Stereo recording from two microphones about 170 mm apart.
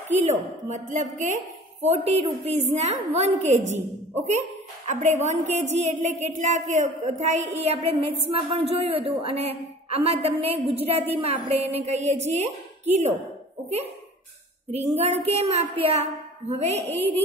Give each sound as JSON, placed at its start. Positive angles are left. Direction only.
{"t": 0.1, "sound": "a woman's voice", "side_deg": -45}
{"t": 4.8, "sound": "a woman's voice", "side_deg": -45}
{"t": 15.0, "sound": "a woman's voice", "side_deg": -40}